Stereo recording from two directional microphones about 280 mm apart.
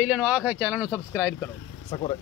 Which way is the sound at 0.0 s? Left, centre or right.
Centre.